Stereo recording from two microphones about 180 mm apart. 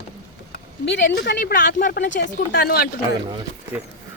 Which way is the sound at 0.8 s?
75° left (ahead or behind).